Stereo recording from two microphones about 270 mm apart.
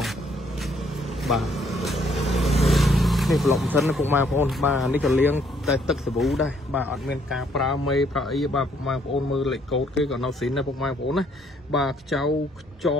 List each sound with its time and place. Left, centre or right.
0.0 s vehicle: centre
2.6 s speech: centre